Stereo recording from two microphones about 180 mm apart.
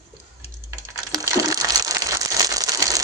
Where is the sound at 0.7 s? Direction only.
20° right (ahead or behind).